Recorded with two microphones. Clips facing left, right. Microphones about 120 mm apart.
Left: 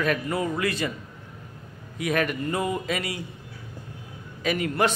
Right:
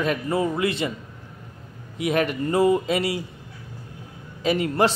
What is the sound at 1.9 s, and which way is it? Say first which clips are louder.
A man's voice: right 3 dB; 25° right (ahead or behind).